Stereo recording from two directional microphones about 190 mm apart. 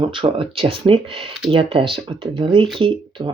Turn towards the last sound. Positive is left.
turn(degrees=-25)  # may be behind; listen again after turning